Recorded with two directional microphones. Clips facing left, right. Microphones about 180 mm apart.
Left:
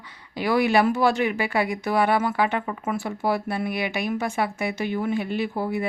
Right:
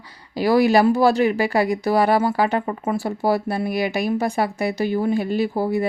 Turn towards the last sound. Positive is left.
turn(degrees=-35)  # may be behind; listen again after turning